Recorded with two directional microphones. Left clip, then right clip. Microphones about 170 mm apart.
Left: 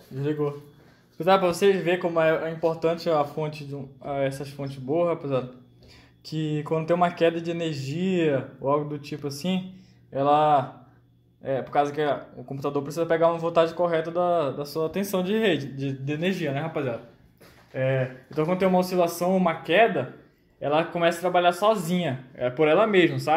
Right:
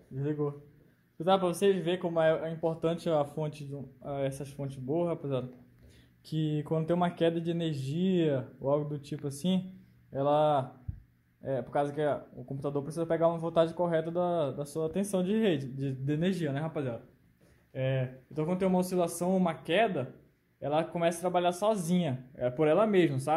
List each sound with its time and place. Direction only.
0.2 s speech: 10° right (ahead or behind); by 16.9 s 25° right (ahead or behind)
17.7 s speech: 15° right (ahead or behind)